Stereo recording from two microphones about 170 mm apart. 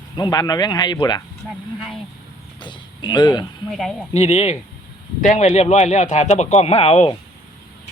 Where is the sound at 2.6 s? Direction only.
25° left (ahead or behind).